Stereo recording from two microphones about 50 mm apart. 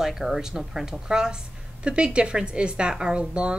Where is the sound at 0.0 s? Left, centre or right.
Centre.